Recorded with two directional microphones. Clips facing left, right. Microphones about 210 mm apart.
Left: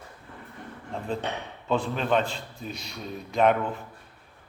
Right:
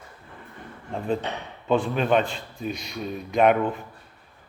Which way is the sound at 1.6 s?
10° right (ahead or behind).